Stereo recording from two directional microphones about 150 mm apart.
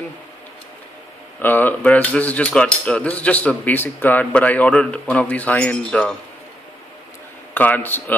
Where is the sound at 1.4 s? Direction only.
10° left (ahead or behind).